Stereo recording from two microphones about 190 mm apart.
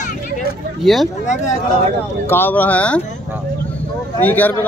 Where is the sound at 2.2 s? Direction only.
10° left (ahead or behind).